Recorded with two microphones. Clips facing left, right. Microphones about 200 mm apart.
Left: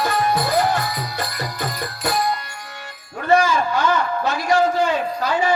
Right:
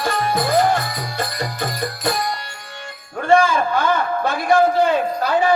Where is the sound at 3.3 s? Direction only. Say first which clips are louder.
Right 1 dB; 55° right (ahead or behind).